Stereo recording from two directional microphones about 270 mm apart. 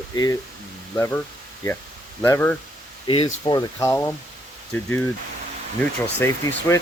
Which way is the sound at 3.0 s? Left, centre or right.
Centre.